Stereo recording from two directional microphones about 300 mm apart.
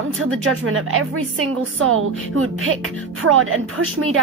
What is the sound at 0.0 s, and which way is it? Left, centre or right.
Speech, right.